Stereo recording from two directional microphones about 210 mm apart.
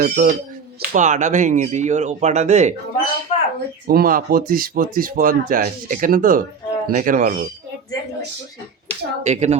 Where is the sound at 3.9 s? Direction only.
45° right (ahead or behind).